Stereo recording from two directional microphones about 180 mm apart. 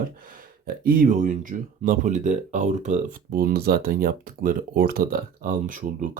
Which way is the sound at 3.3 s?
60° right (ahead or behind).